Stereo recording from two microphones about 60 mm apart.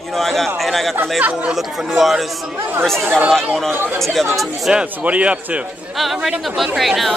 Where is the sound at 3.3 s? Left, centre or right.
Centre.